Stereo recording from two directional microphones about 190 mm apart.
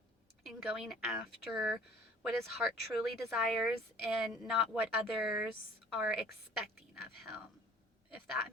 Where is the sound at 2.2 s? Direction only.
Centre (ahead or behind).